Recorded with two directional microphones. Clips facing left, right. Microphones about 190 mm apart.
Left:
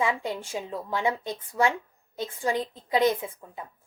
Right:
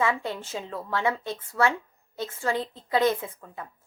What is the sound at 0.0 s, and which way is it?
A woman's voice, 15° left (ahead or behind).